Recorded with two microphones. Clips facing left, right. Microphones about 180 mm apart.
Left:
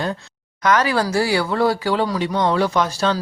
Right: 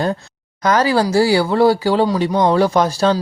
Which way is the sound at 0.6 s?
35° right (ahead or behind).